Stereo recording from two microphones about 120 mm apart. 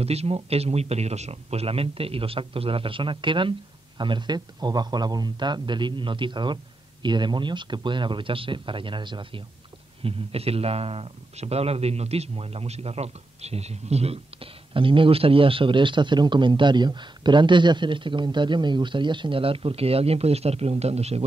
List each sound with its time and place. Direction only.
0.0 s a man's voice: 60° right (ahead or behind); by 9.4 s 40° right (ahead or behind)
10.0 s speech: 55° right (ahead or behind)